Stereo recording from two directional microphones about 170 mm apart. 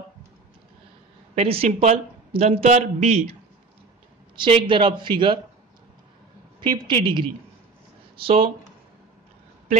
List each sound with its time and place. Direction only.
1.3 s speech: 35° right (ahead or behind)
4.4 s speech: 30° right (ahead or behind)
6.6 s speech: 30° right (ahead or behind)